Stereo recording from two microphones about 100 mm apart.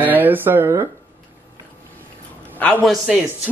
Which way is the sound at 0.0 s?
20° right (ahead or behind).